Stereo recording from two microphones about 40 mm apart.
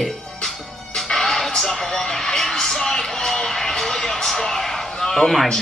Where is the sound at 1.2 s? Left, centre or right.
Centre.